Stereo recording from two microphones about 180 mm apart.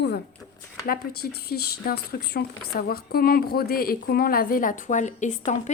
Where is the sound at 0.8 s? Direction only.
55° left (ahead or behind).